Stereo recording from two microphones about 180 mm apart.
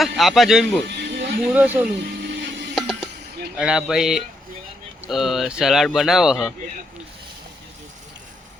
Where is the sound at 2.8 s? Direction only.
Centre (ahead or behind).